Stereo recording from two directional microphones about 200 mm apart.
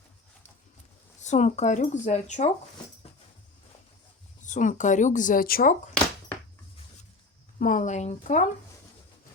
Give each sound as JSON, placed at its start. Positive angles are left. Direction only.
{"t": 1.2, "sound": "speech", "side_deg": 35}
{"t": 4.4, "sound": "speech", "side_deg": 40}
{"t": 7.6, "sound": "speech", "side_deg": 40}